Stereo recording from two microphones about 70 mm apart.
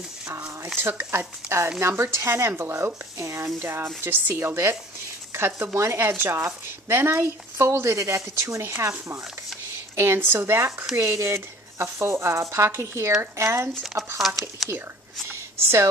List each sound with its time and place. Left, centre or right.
0.7 s speech: right
9.9 s speech: right
14.1 s speech: centre
15.2 s a sound: right